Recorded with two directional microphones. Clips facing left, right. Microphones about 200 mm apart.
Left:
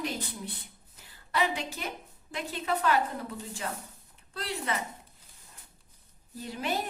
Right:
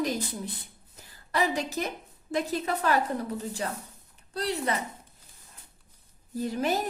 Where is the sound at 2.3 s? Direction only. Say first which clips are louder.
Right 4 dB; 40° right (ahead or behind).